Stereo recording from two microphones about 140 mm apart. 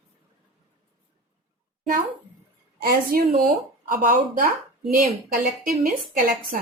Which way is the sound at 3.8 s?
75° right (ahead or behind).